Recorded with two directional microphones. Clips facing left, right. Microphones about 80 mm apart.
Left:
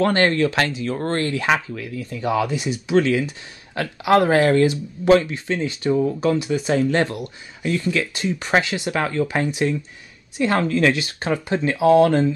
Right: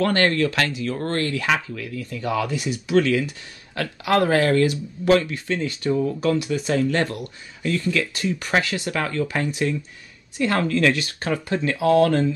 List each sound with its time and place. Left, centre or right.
0.0 s speech: left